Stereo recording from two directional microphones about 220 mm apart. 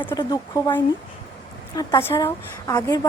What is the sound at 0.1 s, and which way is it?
Speech, 20° left (ahead or behind).